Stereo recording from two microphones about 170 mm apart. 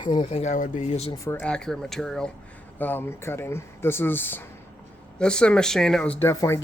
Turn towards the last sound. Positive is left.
turn(degrees=20)  # may be behind; listen again after turning